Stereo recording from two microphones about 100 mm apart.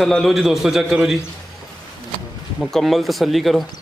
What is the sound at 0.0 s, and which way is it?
A man's voice, centre (ahead or behind).